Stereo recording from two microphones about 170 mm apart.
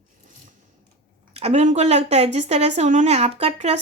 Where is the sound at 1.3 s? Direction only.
35° right (ahead or behind).